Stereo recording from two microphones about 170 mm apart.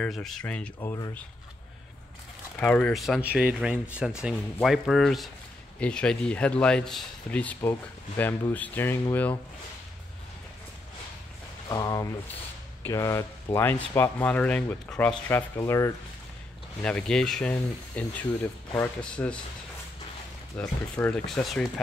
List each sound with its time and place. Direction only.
0.0 s speech: centre (ahead or behind)
0.7 s speech: 20° left (ahead or behind)
2.6 s speech: 5° left (ahead or behind)
11.7 s speech: 20° left (ahead or behind)
16.8 s speech: 5° left (ahead or behind)
20.5 s speech: 10° left (ahead or behind)